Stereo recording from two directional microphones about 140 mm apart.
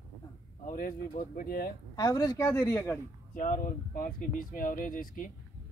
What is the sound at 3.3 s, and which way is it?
Speech, 75° left (ahead or behind).